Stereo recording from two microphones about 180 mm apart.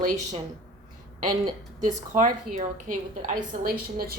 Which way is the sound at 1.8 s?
45° right (ahead or behind).